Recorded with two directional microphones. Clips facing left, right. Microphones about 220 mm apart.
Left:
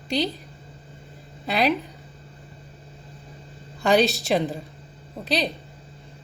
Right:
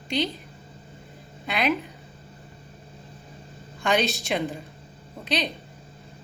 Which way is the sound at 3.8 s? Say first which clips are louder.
Left 5 dB; 35° left (ahead or behind).